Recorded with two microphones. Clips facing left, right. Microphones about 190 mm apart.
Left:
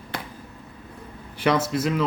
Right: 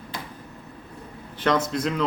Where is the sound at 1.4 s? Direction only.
10° left (ahead or behind).